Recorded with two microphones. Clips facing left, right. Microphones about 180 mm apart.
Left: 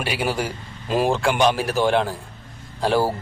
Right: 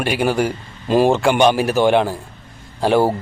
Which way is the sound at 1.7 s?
70° right (ahead or behind).